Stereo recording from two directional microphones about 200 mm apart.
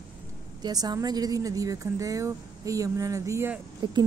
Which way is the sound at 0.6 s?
20° right (ahead or behind).